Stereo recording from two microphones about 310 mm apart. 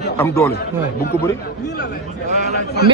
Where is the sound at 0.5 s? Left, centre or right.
Left.